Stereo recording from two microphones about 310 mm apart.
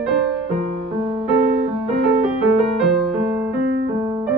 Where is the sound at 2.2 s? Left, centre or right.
Centre.